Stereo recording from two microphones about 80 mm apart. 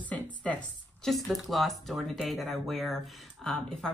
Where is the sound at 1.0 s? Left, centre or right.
Centre.